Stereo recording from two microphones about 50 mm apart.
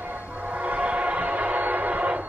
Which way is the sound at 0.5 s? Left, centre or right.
Right.